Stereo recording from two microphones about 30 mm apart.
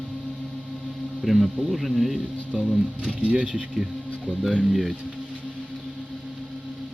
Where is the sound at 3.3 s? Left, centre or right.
Right.